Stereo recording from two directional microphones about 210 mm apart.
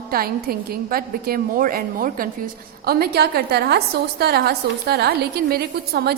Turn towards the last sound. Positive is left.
turn(degrees=-50)  # may be behind; listen again after turning